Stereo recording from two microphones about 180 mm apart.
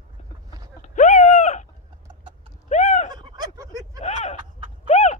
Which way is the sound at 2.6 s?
40° left (ahead or behind).